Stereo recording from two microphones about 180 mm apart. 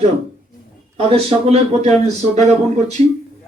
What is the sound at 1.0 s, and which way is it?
Speech, 35° right (ahead or behind).